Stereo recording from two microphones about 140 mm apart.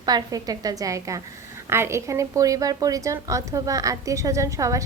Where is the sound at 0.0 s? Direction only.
30° right (ahead or behind).